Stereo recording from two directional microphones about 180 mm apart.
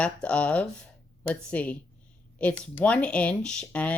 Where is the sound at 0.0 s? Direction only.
5° left (ahead or behind).